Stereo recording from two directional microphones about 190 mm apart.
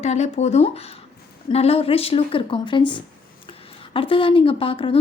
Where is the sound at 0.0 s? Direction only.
35° left (ahead or behind).